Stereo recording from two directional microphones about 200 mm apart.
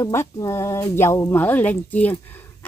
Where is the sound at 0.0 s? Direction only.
15° left (ahead or behind).